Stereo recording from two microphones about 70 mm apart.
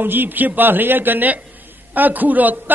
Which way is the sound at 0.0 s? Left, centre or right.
Right.